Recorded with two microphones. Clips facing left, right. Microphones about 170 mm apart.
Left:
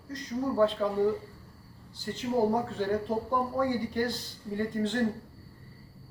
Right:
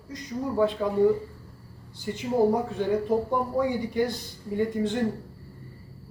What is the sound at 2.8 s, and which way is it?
Speech, 15° right (ahead or behind).